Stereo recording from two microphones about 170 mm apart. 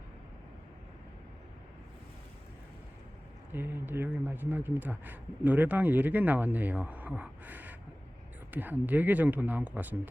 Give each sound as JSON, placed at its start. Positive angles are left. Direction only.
{"t": 3.5, "sound": "speech", "side_deg": -10}